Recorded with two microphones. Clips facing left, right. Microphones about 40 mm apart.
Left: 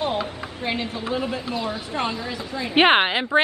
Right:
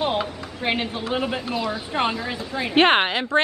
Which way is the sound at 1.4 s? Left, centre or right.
Centre.